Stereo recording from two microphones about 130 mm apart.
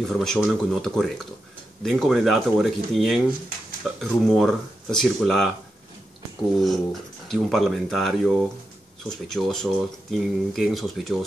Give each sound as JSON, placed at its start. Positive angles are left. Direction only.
{"t": 0.0, "sound": "speech", "side_deg": 5}
{"t": 6.6, "sound": "speech", "side_deg": 0}